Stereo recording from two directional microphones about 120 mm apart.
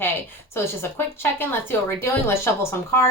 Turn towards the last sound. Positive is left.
turn(degrees=20)  # may be behind; listen again after turning